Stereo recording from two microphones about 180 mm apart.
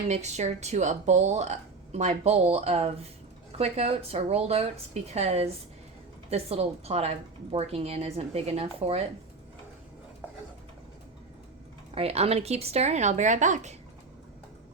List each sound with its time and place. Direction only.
0.1 s speech: 40° right (ahead or behind)
11.9 s speech: 35° right (ahead or behind)